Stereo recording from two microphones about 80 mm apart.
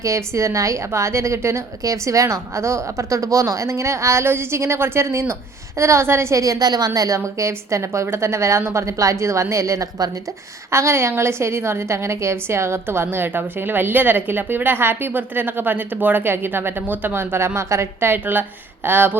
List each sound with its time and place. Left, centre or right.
0.0 s a woman's voice: right